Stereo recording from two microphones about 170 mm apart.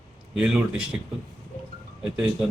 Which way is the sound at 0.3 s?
5° right (ahead or behind).